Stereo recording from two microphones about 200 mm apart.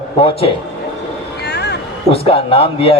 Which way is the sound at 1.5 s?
55° left (ahead or behind).